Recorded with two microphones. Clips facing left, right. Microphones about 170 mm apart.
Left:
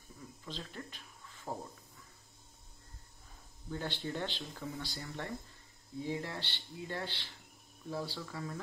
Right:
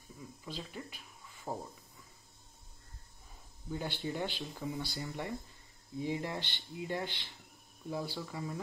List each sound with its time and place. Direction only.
0.5 s speech: 10° right (ahead or behind)
3.7 s speech: 10° right (ahead or behind)